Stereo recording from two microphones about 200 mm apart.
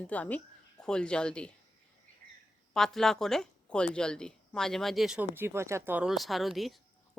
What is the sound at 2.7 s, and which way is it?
Speech, centre (ahead or behind).